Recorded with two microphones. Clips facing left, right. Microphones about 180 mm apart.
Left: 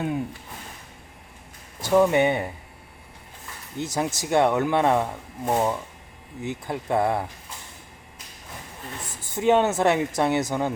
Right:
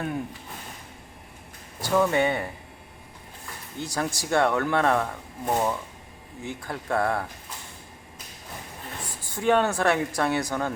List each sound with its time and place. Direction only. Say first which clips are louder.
1.8 s speech: left 4 dB; 15° left (ahead or behind)
3.8 s speech: left 3 dB; 20° left (ahead or behind)
9.3 s speech: left 2 dB; 20° left (ahead or behind)